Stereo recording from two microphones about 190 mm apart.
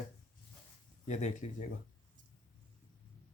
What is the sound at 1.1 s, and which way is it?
Speech, 40° left (ahead or behind).